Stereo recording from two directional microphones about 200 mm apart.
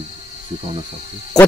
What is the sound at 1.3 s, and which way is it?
Frog, centre (ahead or behind).